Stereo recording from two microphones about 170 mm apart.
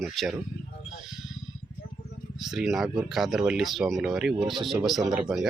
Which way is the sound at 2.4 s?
Centre (ahead or behind).